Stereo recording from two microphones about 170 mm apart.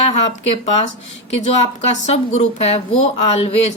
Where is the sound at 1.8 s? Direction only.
40° left (ahead or behind).